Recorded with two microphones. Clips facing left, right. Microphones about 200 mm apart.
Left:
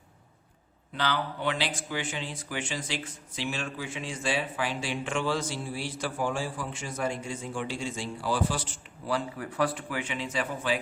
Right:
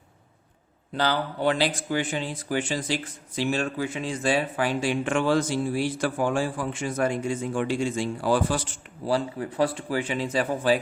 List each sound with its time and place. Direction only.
0.9 s speech: 35° right (ahead or behind)
9.0 s speech: 30° right (ahead or behind)